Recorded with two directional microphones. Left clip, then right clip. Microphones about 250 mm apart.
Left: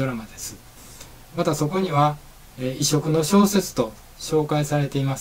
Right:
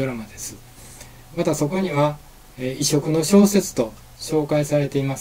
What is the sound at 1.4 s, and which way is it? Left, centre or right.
Speech, centre.